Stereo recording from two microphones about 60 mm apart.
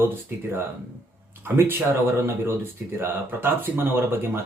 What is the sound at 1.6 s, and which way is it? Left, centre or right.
Speech, right.